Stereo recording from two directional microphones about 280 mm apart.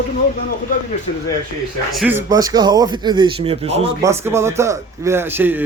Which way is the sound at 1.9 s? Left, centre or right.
Centre.